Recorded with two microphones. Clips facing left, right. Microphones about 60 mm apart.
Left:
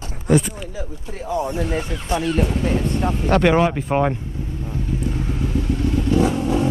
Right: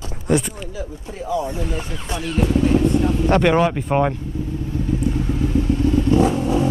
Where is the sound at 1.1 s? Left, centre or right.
Left.